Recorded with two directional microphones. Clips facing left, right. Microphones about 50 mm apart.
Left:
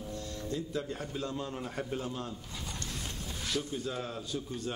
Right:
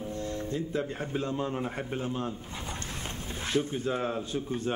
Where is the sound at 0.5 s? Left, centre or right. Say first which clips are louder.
Right 1 dB; right.